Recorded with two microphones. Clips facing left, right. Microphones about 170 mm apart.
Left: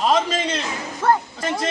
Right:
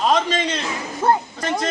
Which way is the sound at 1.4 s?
5° left (ahead or behind).